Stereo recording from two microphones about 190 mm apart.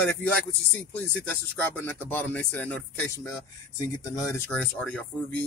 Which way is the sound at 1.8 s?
10° left (ahead or behind).